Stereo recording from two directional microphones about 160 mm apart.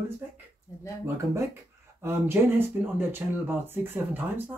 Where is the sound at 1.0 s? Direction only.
15° right (ahead or behind).